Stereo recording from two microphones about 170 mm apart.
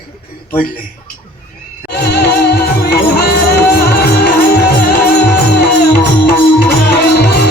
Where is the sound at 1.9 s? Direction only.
75° left (ahead or behind).